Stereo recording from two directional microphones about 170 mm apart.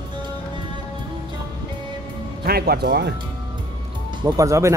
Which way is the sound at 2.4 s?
65° right (ahead or behind).